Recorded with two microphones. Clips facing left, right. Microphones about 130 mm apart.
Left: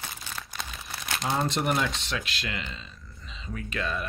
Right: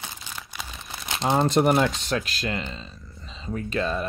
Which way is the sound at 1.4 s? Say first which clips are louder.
Right 7 dB; 45° right (ahead or behind).